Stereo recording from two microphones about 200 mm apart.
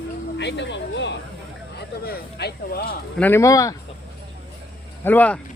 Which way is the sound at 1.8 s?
55° left (ahead or behind).